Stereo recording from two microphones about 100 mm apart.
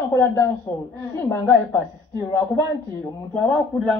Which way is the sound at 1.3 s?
25° left (ahead or behind).